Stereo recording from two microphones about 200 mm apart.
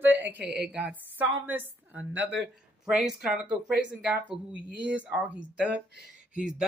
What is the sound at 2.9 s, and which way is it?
Speech, centre (ahead or behind).